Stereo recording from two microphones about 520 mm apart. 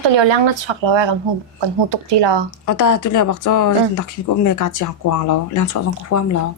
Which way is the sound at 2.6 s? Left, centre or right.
Left.